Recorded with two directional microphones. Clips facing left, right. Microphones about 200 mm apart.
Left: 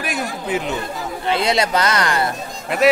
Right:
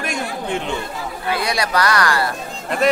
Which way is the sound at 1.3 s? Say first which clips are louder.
Left 3 dB; 25° left (ahead or behind).